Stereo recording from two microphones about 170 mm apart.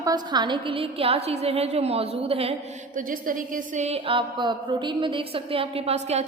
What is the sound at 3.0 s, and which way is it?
A woman's voice, 55° right (ahead or behind).